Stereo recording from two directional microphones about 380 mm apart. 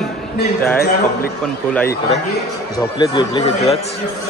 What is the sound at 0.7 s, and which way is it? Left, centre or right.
Speech, left.